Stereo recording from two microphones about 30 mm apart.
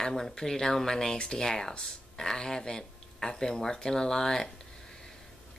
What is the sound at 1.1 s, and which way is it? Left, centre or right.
Speech, left.